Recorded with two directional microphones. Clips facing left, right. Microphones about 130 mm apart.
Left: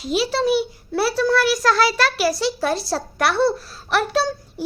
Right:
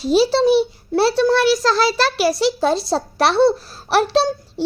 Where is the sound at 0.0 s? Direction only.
30° right (ahead or behind).